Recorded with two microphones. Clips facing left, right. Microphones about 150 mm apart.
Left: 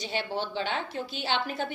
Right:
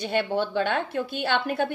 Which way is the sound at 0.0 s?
55° right (ahead or behind).